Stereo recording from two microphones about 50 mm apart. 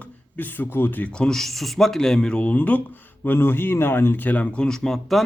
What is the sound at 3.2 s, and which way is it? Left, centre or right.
Speech, left.